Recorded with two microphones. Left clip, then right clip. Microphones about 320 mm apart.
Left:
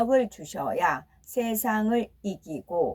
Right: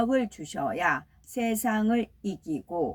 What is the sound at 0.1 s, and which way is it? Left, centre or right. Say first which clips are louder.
Speech: left 4 dB; centre.